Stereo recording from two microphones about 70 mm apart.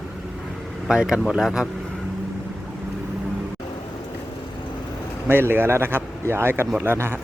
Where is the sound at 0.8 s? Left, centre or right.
Centre.